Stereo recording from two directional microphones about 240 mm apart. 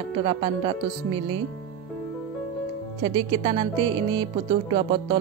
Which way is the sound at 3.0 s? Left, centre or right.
Right.